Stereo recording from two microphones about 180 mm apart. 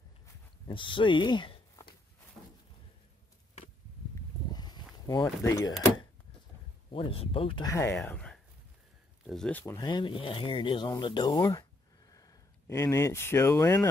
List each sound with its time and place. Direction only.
0.7 s speech: 25° left (ahead or behind)
4.5 s power windows: 25° left (ahead or behind)
6.9 s speech: 30° left (ahead or behind)
7.7 s speech: 15° left (ahead or behind)